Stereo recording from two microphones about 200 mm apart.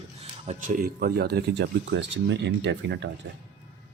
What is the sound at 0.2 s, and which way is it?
Speech, 35° right (ahead or behind).